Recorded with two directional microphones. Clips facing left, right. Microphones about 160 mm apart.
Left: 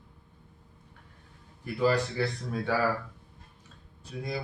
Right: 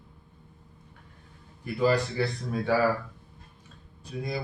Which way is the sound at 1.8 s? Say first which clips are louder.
Right 1 dB; 15° right (ahead or behind).